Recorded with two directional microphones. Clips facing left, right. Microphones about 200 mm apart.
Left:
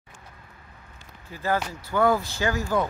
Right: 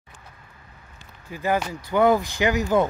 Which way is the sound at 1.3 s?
15° right (ahead or behind).